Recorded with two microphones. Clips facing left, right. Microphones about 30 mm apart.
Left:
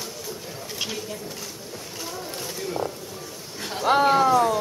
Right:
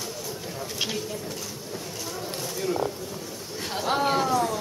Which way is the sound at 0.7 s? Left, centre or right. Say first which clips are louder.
Right 1 dB; centre.